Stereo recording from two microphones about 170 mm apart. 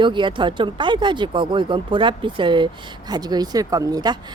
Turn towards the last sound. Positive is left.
turn(degrees=-25)  # may be behind; listen again after turning